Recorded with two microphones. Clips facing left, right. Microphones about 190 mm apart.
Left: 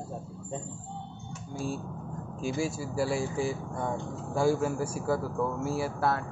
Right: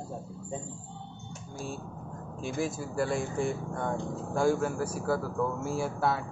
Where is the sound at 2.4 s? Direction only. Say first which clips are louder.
Left 1 dB; 10° left (ahead or behind).